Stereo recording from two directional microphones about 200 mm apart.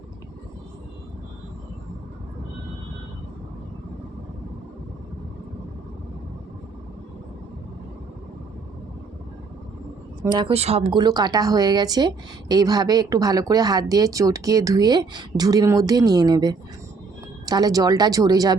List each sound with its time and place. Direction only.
10.3 s speech: 25° right (ahead or behind)